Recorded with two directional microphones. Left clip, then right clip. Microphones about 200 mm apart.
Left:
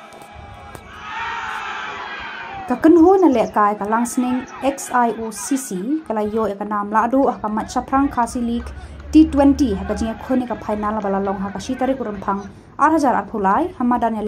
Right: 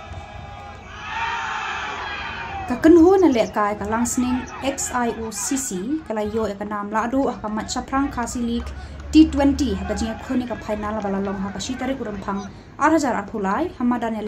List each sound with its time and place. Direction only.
1.0 s crowd: 30° right (ahead or behind)
2.0 s a sound: 30° right (ahead or behind)
2.6 s a woman's voice: 5° left (ahead or behind)
5.4 s speech: 30° right (ahead or behind)
5.7 s speech: 5° left (ahead or behind)
9.1 s a woman's voice: 5° left (ahead or behind)